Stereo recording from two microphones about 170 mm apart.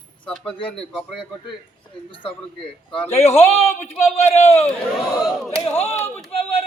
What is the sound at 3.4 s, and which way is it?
A man's voice, 40° left (ahead or behind).